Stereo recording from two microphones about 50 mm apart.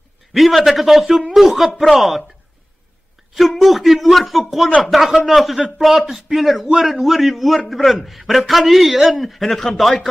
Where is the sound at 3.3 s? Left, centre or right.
Centre.